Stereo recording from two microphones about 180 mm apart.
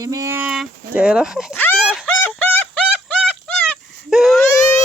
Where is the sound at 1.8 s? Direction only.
Centre (ahead or behind).